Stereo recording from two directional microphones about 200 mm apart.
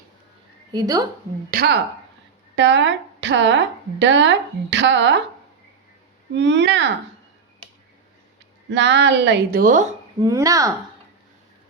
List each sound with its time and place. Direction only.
0.7 s speech: 20° right (ahead or behind)
1.5 s speech: 50° right (ahead or behind)
2.6 s a woman's voice: 65° right (ahead or behind)
6.3 s a woman's voice: 60° right (ahead or behind)
8.7 s a woman's voice: 60° right (ahead or behind); by 9.9 s 40° right (ahead or behind)
10.2 s speech: 15° right (ahead or behind)